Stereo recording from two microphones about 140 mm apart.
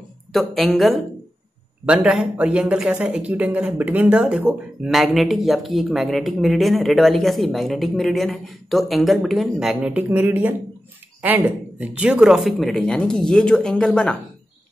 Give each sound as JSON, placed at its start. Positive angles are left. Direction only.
{"t": 0.3, "sound": "speech", "side_deg": 0}